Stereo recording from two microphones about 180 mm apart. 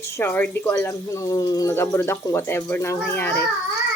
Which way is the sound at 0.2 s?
10° left (ahead or behind).